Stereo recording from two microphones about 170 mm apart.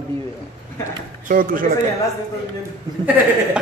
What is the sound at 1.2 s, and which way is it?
Speech, 55° right (ahead or behind).